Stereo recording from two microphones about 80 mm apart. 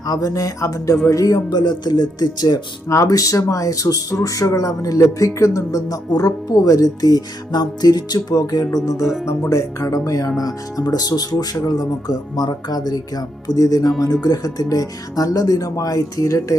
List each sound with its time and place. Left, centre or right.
0.0 s speech: left
2.9 s speech: left
9.2 s speech: left